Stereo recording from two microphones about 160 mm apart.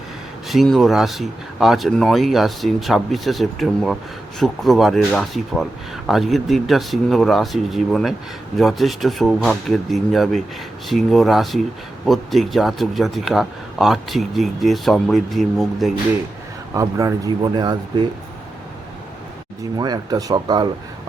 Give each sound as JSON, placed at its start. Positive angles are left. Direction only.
{"t": 0.4, "sound": "a man's voice", "side_deg": 0}
{"t": 16.7, "sound": "speech", "side_deg": -20}
{"t": 19.7, "sound": "speech", "side_deg": -25}